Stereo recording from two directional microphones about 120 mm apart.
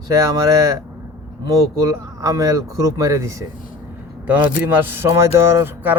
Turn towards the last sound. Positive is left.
turn(degrees=-15)  # may be behind; listen again after turning